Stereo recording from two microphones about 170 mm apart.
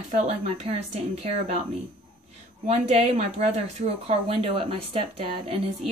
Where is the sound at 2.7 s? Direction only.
40° right (ahead or behind).